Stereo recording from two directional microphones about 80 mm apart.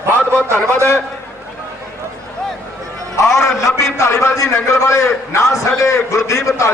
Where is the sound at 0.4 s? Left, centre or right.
Right.